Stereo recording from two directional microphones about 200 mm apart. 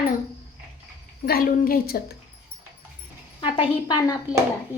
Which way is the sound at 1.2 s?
50° left (ahead or behind).